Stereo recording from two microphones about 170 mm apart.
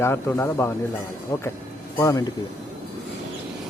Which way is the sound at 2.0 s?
20° left (ahead or behind).